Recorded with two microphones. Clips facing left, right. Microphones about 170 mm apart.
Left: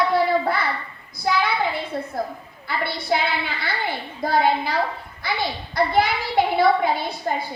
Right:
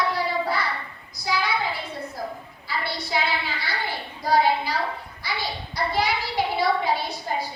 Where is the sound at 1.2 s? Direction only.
55° left (ahead or behind).